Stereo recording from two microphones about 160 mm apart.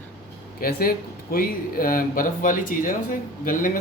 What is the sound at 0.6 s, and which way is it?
A man's voice, 65° left (ahead or behind).